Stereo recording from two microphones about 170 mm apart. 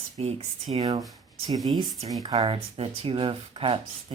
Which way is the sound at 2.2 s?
25° right (ahead or behind).